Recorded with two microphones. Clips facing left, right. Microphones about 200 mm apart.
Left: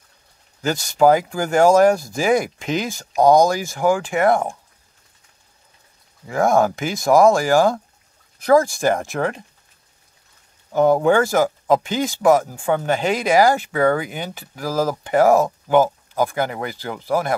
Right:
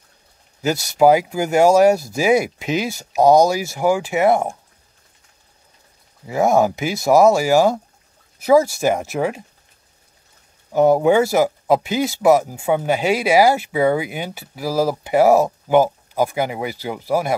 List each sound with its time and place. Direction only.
0.6 s speech: 10° right (ahead or behind)
6.2 s speech: 5° right (ahead or behind)
10.7 s speech: 10° right (ahead or behind)